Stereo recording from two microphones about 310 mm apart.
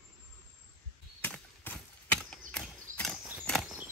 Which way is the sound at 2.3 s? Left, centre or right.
Centre.